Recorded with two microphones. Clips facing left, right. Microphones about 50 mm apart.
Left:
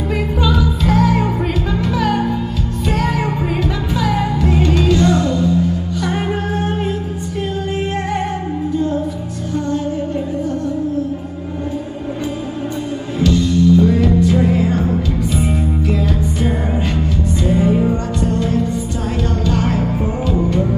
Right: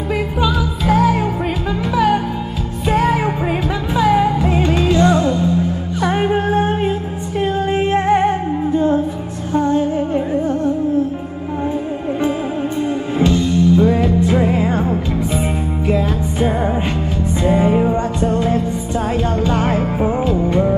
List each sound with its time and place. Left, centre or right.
0.4 s music: centre; by 6.9 s right
7.9 s music: right
13.2 s music: right